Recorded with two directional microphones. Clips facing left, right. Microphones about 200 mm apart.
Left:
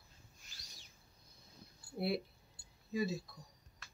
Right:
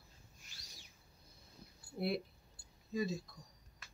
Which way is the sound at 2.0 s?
5° left (ahead or behind).